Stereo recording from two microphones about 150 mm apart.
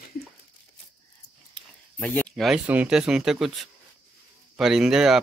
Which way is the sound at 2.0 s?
10° left (ahead or behind).